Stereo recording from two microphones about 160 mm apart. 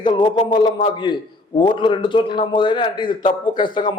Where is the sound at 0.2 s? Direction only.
30° left (ahead or behind).